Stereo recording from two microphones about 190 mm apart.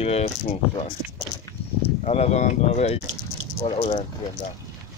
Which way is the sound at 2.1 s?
35° left (ahead or behind).